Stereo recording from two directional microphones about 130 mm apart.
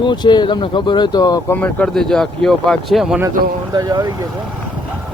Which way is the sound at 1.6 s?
5° left (ahead or behind).